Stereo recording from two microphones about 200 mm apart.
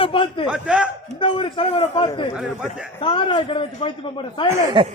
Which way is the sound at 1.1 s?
25° left (ahead or behind).